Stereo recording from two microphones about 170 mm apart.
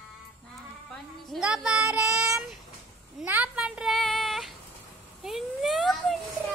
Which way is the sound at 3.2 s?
10° right (ahead or behind).